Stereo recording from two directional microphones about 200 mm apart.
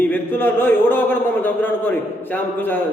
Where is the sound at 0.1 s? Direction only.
10° left (ahead or behind).